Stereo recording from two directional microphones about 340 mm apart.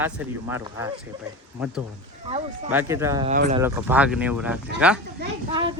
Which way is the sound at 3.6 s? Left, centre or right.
Centre.